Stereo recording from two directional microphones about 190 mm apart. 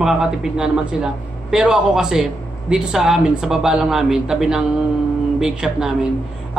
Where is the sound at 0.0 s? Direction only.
Centre (ahead or behind).